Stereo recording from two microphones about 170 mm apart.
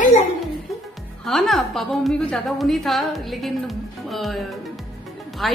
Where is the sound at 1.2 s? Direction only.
Centre (ahead or behind).